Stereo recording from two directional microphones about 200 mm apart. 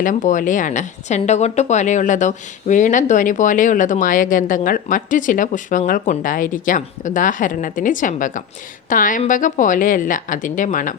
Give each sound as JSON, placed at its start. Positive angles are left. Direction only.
{"t": 0.0, "sound": "a woman's voice", "side_deg": 40}